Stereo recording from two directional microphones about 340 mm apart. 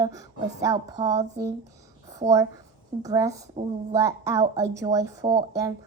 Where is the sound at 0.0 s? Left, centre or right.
Centre.